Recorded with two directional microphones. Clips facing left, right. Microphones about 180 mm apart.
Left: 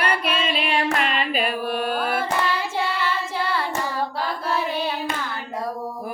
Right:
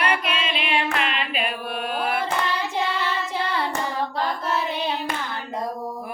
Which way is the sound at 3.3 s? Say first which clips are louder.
Even; 20° right (ahead or behind).